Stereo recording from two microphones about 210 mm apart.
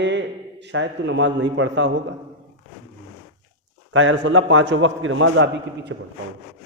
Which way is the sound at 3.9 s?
65° right (ahead or behind).